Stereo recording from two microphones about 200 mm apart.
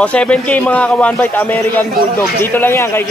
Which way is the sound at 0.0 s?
5° left (ahead or behind).